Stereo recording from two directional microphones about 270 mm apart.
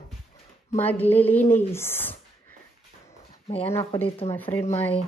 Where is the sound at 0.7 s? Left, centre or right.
Centre.